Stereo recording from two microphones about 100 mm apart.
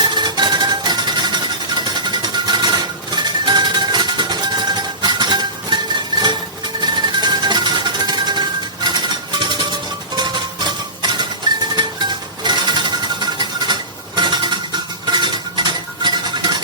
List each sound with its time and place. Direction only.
0.0 s music: 50° right (ahead or behind)
14.2 s dishes: 45° right (ahead or behind)